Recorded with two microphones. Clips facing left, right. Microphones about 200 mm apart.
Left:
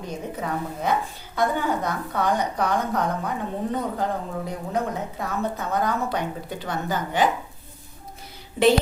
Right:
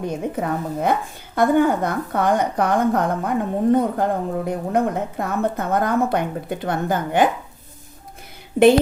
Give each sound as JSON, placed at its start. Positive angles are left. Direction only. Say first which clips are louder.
{"t": 0.3, "sound": "a woman's voice", "louder": "right 5 dB", "side_deg": -55}
{"t": 8.6, "sound": "a woman's voice", "louder": "right 6 dB", "side_deg": -55}